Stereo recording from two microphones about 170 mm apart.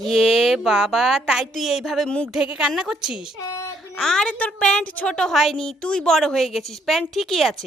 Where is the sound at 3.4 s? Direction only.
20° left (ahead or behind).